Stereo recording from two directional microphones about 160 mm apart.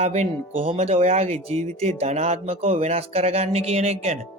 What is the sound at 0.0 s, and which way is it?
Speech, 45° right (ahead or behind).